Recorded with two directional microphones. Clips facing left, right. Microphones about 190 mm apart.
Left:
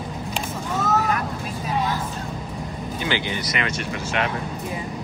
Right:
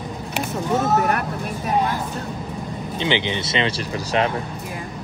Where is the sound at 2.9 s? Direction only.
20° right (ahead or behind).